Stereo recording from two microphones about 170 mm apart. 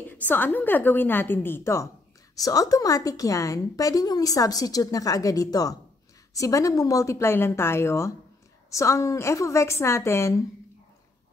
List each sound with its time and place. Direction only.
0.1 s a woman's voice: 10° left (ahead or behind)